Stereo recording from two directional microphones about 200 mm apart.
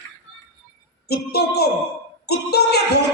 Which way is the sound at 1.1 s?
50° left (ahead or behind).